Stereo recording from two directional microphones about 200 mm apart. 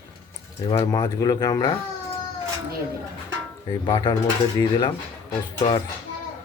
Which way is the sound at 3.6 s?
20° left (ahead or behind).